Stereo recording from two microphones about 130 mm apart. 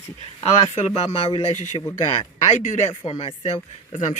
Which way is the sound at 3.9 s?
65° left (ahead or behind).